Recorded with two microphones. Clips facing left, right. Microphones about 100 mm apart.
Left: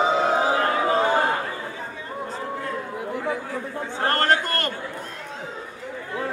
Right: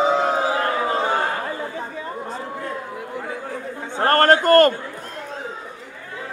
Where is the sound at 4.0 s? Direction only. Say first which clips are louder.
Right 6 dB; 50° right (ahead or behind).